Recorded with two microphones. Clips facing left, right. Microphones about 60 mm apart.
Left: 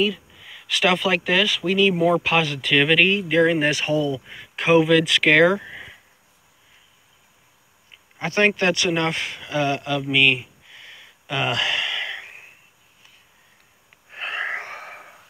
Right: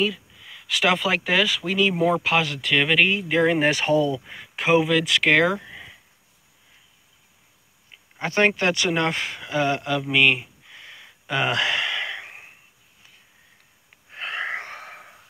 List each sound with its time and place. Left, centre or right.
0.0 s speech: centre
3.3 s speech: right
4.6 s speech: centre
5.6 s a sound: left
8.2 s speech: right
8.5 s speech: centre
8.7 s speech: right
10.1 s a sound: right
14.1 s wheeze: left